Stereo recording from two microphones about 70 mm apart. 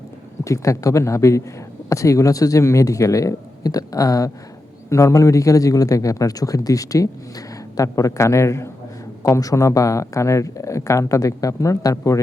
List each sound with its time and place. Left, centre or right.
0.4 s a man's voice: left